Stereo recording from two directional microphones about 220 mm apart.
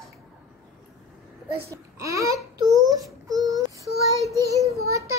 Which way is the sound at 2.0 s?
15° right (ahead or behind).